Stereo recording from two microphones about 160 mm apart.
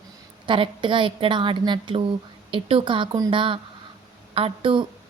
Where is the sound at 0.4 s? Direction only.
30° right (ahead or behind).